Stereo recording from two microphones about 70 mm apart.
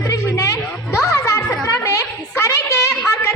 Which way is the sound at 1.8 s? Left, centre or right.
Left.